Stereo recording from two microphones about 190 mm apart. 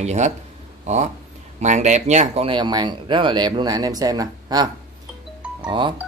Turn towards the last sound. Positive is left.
turn(degrees=-25)  # may be behind; listen again after turning